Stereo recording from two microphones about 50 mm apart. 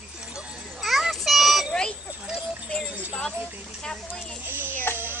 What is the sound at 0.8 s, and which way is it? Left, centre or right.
Child singing, centre.